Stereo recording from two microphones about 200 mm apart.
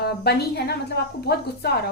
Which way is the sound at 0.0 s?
55° left (ahead or behind).